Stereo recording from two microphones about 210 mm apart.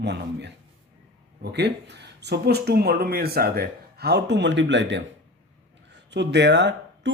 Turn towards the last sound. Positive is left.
turn(degrees=-55)  # may be behind; listen again after turning